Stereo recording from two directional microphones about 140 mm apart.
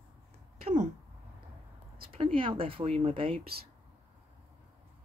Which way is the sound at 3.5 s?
90° right.